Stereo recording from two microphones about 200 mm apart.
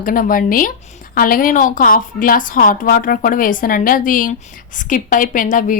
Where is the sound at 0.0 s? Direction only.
45° left (ahead or behind).